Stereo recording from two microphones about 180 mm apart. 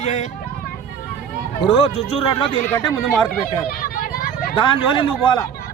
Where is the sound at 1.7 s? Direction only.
35° left (ahead or behind).